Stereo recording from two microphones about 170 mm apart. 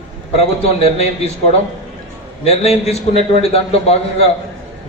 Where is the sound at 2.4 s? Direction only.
40° left (ahead or behind).